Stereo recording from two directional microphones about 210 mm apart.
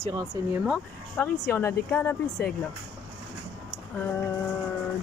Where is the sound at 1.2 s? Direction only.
10° left (ahead or behind).